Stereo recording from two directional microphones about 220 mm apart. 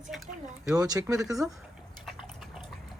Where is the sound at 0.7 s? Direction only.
15° right (ahead or behind).